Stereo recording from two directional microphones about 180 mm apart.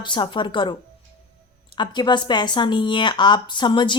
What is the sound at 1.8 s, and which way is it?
A woman's voice, 25° left (ahead or behind).